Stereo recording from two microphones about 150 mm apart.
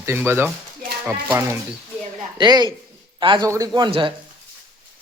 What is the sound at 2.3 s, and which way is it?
Speech, 30° right (ahead or behind).